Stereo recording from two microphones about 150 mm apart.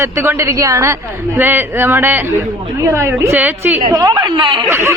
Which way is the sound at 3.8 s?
30° right (ahead or behind).